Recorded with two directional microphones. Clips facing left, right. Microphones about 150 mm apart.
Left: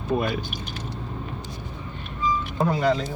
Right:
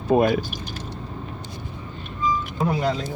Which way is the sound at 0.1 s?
45° right (ahead or behind).